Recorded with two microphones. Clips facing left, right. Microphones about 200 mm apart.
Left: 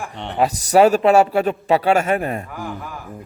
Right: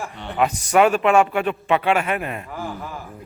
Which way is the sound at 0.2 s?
30° left (ahead or behind).